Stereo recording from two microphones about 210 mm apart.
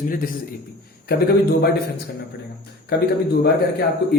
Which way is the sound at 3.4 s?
50° left (ahead or behind).